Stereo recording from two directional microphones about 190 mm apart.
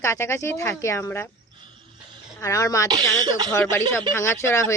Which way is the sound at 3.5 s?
10° left (ahead or behind).